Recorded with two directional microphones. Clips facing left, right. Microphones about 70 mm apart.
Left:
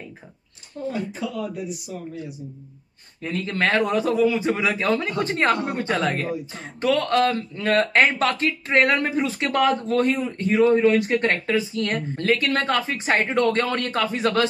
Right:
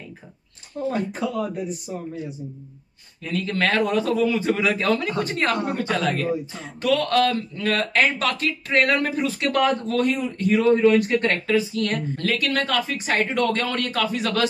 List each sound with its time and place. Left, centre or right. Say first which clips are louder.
0.8 s speech: right 3 dB; right
3.2 s speech: even; left